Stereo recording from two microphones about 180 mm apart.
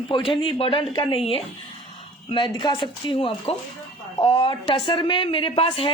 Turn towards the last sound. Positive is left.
turn(degrees=30)  # may be behind; listen again after turning